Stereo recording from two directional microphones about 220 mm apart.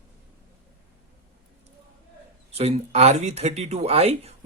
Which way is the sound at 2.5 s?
30° right (ahead or behind).